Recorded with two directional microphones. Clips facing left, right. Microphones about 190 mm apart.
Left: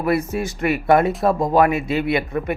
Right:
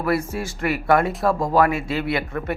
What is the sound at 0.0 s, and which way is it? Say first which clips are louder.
A man's voice: left 3 dB; 20° left (ahead or behind).